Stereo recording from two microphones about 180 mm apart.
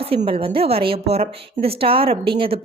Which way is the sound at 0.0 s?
30° right (ahead or behind).